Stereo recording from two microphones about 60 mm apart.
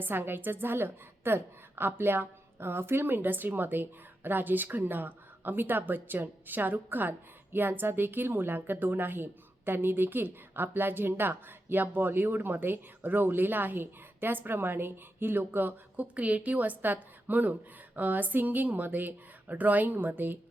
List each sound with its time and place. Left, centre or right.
0.0 s a woman's voice: right